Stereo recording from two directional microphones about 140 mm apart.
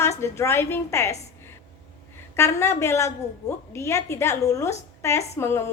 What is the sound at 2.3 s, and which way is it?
A woman's voice, 20° left (ahead or behind).